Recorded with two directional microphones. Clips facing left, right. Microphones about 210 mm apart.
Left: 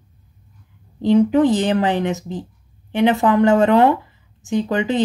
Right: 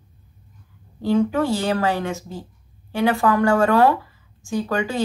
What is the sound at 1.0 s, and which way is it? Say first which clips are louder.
Speech: left 6 dB; 20° left (ahead or behind).